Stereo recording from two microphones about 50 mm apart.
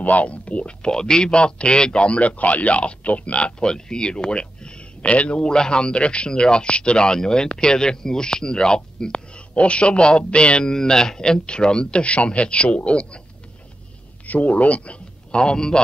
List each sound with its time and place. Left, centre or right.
0.0 s speech: left
14.2 s a man's voice: left; by 15.8 s centre